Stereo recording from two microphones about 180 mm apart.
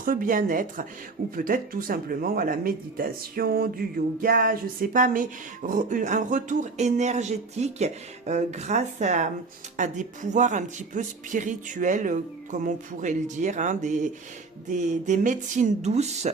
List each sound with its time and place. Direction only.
0.0 s speech: 50° right (ahead or behind)